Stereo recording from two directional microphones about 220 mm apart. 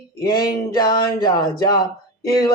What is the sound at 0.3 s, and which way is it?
Speech, 15° left (ahead or behind).